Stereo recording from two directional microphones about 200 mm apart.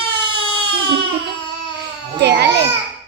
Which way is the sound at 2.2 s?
55° right (ahead or behind).